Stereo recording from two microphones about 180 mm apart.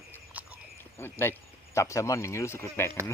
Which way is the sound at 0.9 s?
15° left (ahead or behind).